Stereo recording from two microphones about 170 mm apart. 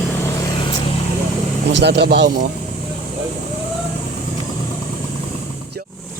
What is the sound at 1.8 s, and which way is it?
Speech, 75° right (ahead or behind).